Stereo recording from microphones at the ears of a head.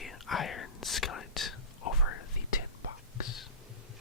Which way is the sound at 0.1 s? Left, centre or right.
Left.